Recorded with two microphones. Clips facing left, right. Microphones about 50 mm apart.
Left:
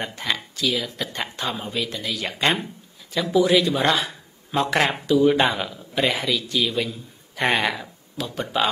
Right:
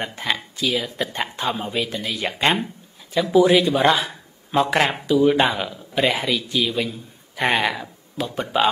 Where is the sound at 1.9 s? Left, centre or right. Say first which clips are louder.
Right 2 dB; right.